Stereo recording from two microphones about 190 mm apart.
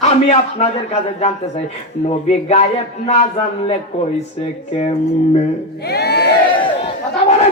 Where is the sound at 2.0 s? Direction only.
35° left (ahead or behind).